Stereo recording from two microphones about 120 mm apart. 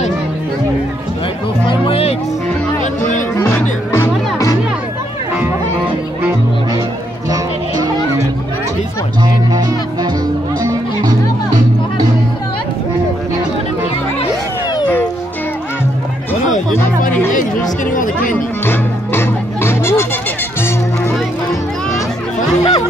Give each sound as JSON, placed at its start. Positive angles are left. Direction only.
{"t": 1.7, "sound": "music", "side_deg": 50}
{"t": 2.8, "sound": "music", "side_deg": 90}
{"t": 3.9, "sound": "music", "side_deg": 25}
{"t": 7.2, "sound": "music", "side_deg": -30}
{"t": 10.6, "sound": "music", "side_deg": -30}
{"t": 18.7, "sound": "music", "side_deg": 20}
{"t": 22.6, "sound": "chatter", "side_deg": 30}